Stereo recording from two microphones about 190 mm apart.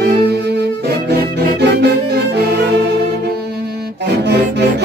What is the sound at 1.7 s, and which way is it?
Music, 60° right (ahead or behind).